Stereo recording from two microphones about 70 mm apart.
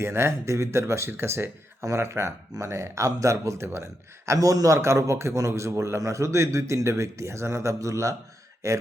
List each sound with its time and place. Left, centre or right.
0.0 s a man's voice: right
4.3 s a man's voice: right